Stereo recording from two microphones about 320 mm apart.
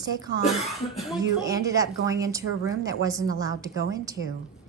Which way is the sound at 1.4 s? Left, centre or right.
Centre.